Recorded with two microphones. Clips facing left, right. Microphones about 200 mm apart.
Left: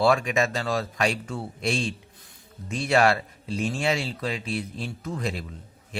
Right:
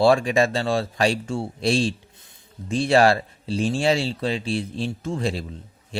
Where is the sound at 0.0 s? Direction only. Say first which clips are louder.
Right 4 dB; 30° right (ahead or behind).